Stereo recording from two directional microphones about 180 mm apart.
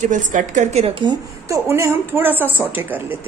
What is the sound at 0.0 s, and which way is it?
Speech, 45° right (ahead or behind).